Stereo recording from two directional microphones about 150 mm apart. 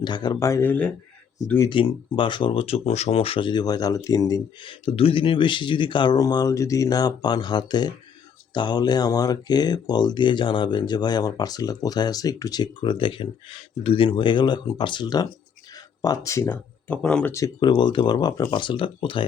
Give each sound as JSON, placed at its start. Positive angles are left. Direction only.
{"t": 0.0, "sound": "speech", "side_deg": 30}
{"t": 1.7, "sound": "speech", "side_deg": 35}
{"t": 4.9, "sound": "speech", "side_deg": 40}
{"t": 17.0, "sound": "speech", "side_deg": 5}
{"t": 17.3, "sound": "speech", "side_deg": 25}